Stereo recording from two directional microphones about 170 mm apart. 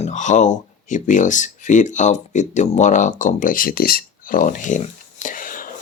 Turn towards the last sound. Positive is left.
turn(degrees=55)  # may be behind; listen again after turning